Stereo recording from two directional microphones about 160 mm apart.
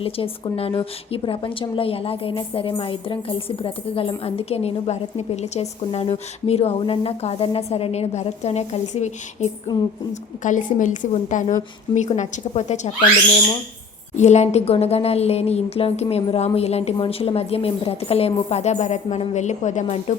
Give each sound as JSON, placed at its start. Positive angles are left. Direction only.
{"t": 0.0, "sound": "a woman's voice", "side_deg": 35}
{"t": 14.2, "sound": "a woman's voice", "side_deg": 45}